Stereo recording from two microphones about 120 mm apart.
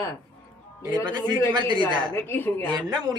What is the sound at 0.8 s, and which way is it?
Speech, 35° right (ahead or behind).